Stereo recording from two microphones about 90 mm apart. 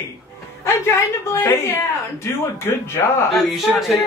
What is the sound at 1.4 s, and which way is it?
A man's voice, 25° left (ahead or behind).